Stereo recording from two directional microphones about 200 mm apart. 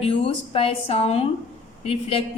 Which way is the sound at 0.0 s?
30° left (ahead or behind).